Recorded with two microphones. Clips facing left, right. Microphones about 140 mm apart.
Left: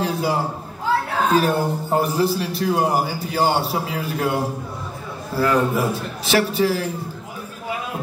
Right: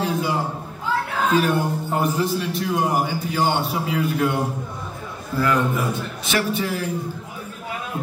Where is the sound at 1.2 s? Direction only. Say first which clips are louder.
Left 1 dB; 35° left (ahead or behind).